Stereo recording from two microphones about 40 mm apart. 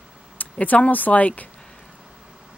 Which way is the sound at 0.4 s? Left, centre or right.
Left.